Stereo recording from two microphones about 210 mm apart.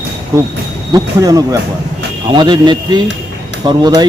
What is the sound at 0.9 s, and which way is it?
Speech, 15° right (ahead or behind).